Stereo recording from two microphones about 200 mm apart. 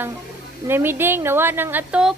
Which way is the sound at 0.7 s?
10° right (ahead or behind).